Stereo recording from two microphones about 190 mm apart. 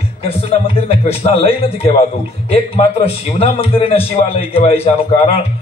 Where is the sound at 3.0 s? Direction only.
30° left (ahead or behind).